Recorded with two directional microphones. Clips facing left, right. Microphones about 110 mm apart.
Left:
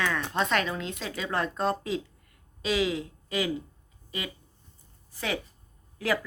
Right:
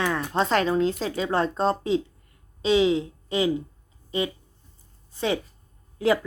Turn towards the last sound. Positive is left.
turn(degrees=-25)  # may be behind; listen again after turning